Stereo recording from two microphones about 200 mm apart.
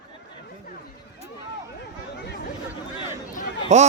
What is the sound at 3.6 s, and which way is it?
Speech, 35° right (ahead or behind).